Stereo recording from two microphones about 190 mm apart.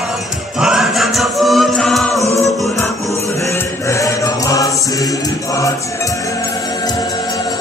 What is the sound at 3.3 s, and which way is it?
Music, 15° left (ahead or behind).